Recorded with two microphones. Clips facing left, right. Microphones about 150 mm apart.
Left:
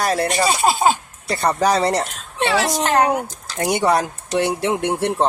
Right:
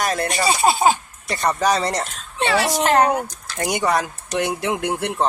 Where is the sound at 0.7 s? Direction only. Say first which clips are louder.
Right 2 dB; 10° right (ahead or behind).